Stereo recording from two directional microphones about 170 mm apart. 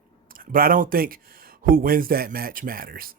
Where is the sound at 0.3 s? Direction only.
55° right (ahead or behind).